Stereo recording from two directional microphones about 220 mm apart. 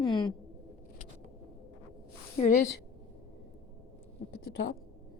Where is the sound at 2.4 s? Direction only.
30° left (ahead or behind).